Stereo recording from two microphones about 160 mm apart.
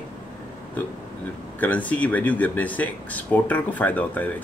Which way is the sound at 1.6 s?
10° left (ahead or behind).